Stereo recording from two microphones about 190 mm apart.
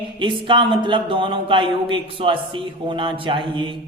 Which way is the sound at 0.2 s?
25° right (ahead or behind).